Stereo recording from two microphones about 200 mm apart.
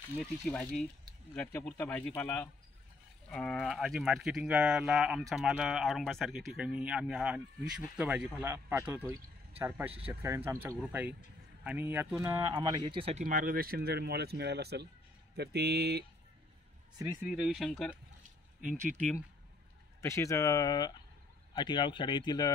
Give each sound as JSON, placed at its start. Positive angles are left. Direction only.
{"t": 0.2, "sound": "speech", "side_deg": 5}
{"t": 13.2, "sound": "speech", "side_deg": -45}
{"t": 17.2, "sound": "speech", "side_deg": 0}
{"t": 20.0, "sound": "speech", "side_deg": 15}